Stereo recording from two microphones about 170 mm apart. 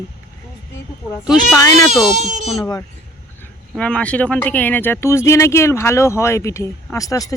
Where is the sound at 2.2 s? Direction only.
45° right (ahead or behind).